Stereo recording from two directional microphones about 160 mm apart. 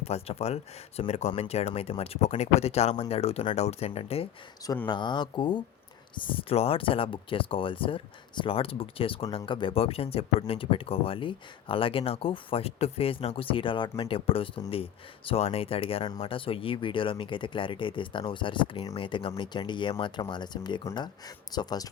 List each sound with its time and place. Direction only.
0.0 s speech: 40° left (ahead or behind)
4.9 s speech: 30° left (ahead or behind)